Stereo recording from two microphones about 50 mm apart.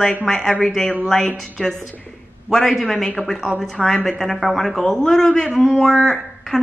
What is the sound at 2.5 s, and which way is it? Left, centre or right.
Speech, centre.